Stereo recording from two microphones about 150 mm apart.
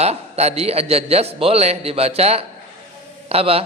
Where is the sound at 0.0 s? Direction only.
45° right (ahead or behind).